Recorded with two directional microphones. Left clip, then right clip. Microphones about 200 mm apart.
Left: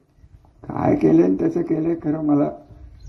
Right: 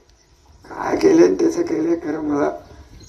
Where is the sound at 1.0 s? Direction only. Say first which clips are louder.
Right 6 dB; 40° left (ahead or behind).